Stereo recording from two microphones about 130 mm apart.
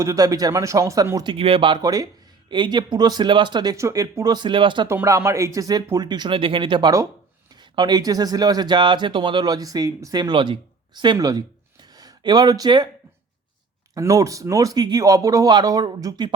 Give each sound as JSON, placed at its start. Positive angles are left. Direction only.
{"t": 0.0, "sound": "speech", "side_deg": -25}
{"t": 1.3, "sound": "speech", "side_deg": -45}
{"t": 1.8, "sound": "speech", "side_deg": -30}
{"t": 4.9, "sound": "speech", "side_deg": -20}
{"t": 13.9, "sound": "speech", "side_deg": -25}